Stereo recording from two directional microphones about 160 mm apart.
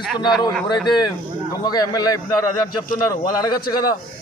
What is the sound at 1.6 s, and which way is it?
A man's voice, 25° left (ahead or behind).